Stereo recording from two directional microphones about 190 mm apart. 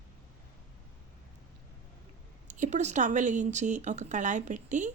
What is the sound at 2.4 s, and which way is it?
A woman's voice, 40° right (ahead or behind).